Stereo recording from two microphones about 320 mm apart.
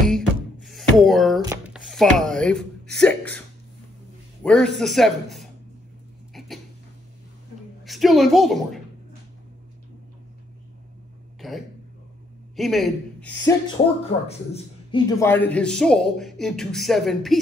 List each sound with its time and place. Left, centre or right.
0.1 s music: centre
1.4 s a sound: centre
1.9 s speech: centre
4.4 s speech: centre
7.8 s a woman's voice: centre
11.4 s a sound: centre
12.5 s a man's voice: centre
13.4 s speech: centre